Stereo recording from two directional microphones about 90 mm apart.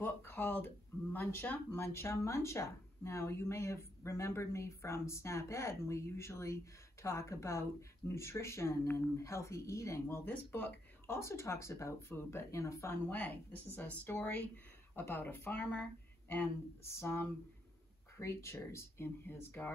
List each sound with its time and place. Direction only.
0.0 s a sound: 20° left (ahead or behind)
1.7 s speech: 30° left (ahead or behind)
13.1 s a woman's voice: 15° left (ahead or behind)